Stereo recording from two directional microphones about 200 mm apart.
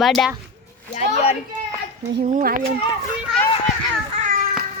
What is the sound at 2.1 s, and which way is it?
Speech, 45° right (ahead or behind).